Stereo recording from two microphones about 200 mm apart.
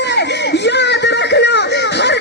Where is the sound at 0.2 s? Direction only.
60° left (ahead or behind).